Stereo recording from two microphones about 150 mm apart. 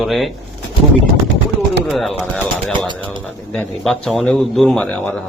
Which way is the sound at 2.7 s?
30° right (ahead or behind).